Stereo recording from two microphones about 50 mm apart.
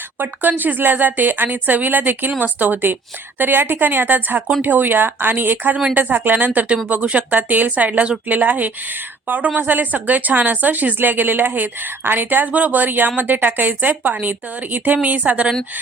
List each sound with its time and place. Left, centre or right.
0.2 s a woman's voice: right